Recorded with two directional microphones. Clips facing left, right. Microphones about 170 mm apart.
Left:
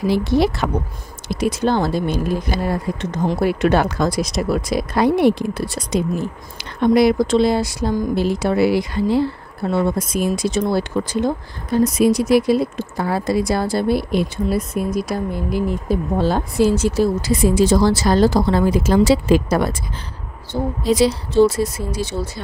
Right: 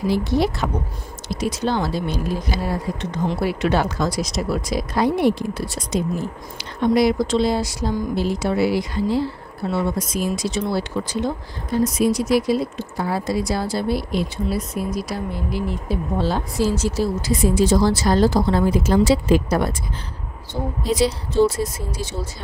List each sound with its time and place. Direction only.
0.1 s speech: 75° left (ahead or behind)
1.3 s speech: 55° left (ahead or behind)
11.8 s speech: 65° left (ahead or behind); by 19.7 s 90° left
20.8 s speech: 90° left; by 22.1 s 70° left (ahead or behind)